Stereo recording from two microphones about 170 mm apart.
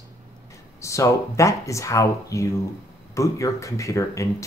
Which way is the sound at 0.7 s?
20° left (ahead or behind).